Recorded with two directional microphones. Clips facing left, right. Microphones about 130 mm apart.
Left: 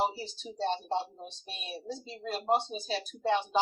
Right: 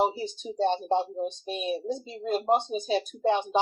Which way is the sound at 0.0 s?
20° right (ahead or behind).